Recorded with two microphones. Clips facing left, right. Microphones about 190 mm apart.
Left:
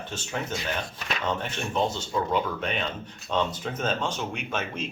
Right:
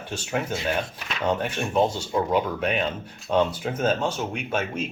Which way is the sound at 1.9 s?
10° right (ahead or behind).